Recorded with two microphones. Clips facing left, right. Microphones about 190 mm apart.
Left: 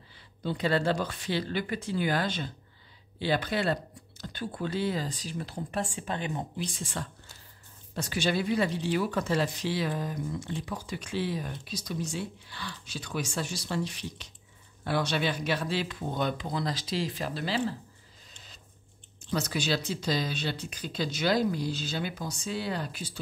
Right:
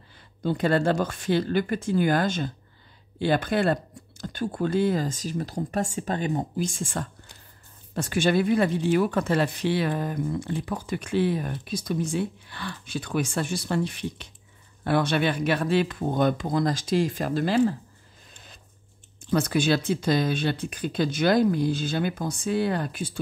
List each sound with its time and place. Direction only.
0.4 s speech: 50° right (ahead or behind)
19.3 s speech: 55° right (ahead or behind)